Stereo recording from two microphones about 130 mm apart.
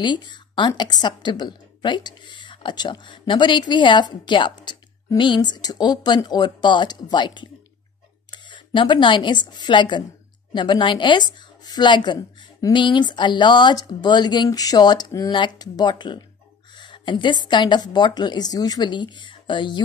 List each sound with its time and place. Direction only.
0.0 s a woman's voice: 35° left (ahead or behind)